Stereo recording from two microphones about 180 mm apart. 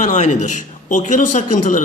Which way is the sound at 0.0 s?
45° left (ahead or behind).